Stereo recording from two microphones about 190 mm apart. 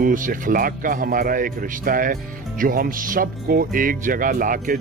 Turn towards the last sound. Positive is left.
turn(degrees=-45)  # may be behind; listen again after turning